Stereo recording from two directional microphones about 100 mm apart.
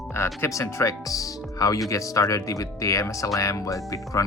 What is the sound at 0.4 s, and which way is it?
Speech, 30° left (ahead or behind).